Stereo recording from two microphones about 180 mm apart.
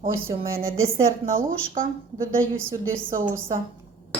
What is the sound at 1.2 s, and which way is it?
Speech, 50° right (ahead or behind).